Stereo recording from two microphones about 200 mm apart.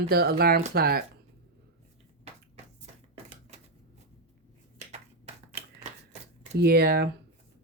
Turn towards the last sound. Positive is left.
turn(degrees=-50)  # may be behind; listen again after turning